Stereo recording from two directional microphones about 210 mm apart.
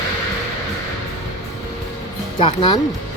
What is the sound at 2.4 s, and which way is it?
Speech, 25° left (ahead or behind).